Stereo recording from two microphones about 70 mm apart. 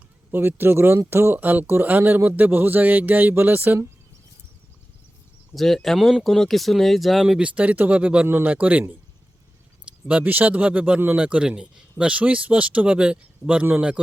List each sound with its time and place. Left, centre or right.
0.3 s speech: right
5.5 s speech: centre; by 8.8 s right
9.8 s speech: centre